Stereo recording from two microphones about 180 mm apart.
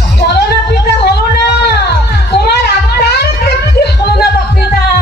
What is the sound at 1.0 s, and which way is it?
Cat, 65° left (ahead or behind).